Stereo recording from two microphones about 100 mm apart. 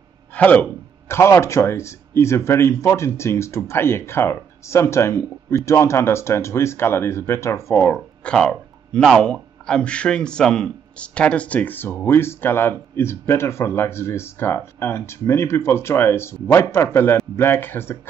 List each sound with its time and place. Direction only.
0.3 s speech: 15° left (ahead or behind)
8.2 s speech: 10° left (ahead or behind)